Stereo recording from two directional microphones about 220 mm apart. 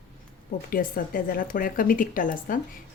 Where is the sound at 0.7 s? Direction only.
40° left (ahead or behind).